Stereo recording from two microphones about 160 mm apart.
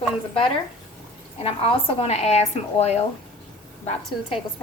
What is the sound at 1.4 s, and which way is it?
A woman's voice, 35° left (ahead or behind).